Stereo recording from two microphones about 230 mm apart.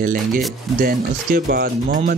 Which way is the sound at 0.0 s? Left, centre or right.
Right.